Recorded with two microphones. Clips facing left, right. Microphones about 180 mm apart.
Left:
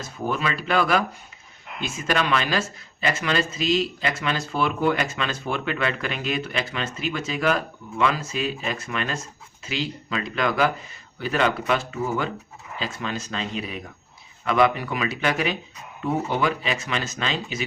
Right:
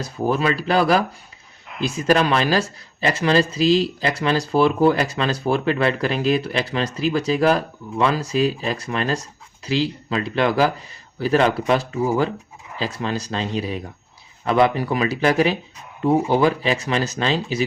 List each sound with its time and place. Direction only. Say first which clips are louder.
0.0 s speech: right 6 dB; 35° right (ahead or behind)